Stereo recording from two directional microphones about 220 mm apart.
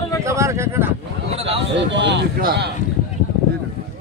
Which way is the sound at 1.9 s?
55° right (ahead or behind).